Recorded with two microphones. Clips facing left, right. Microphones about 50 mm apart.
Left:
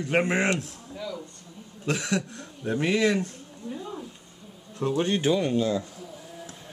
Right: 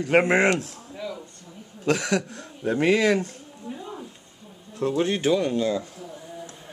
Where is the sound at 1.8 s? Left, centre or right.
Right.